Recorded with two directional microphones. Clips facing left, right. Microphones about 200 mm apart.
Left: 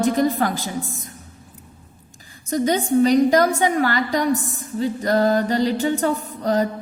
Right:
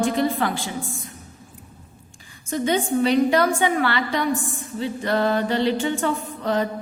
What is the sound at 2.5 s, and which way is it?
A woman's voice, 40° left (ahead or behind).